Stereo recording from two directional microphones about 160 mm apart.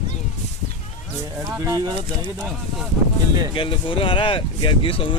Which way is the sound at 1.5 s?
20° right (ahead or behind).